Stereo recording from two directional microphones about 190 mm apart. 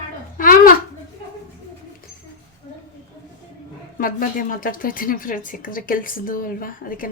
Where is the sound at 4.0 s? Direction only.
45° left (ahead or behind).